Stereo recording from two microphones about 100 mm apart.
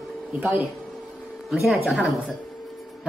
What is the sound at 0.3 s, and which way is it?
Speech, 15° right (ahead or behind).